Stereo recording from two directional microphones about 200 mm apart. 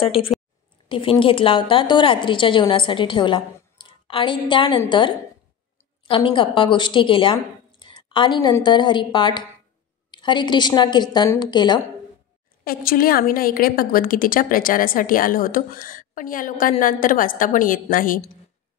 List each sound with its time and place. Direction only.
0.0 s a woman's voice: 25° left (ahead or behind)
12.6 s a woman's voice: 45° left (ahead or behind)